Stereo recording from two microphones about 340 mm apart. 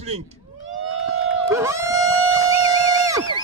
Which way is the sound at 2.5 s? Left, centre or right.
Centre.